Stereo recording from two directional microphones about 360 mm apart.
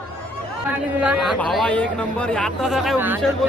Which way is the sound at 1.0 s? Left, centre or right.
Centre.